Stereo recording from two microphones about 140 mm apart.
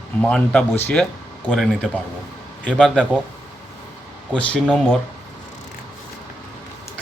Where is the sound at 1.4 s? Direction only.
Centre (ahead or behind).